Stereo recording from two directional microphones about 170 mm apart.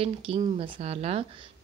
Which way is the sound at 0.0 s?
35° right (ahead or behind).